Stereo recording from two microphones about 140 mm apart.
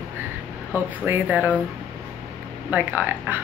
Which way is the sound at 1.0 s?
10° right (ahead or behind).